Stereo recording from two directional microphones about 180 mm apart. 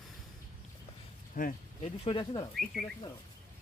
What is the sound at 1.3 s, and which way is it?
Speech, 50° left (ahead or behind).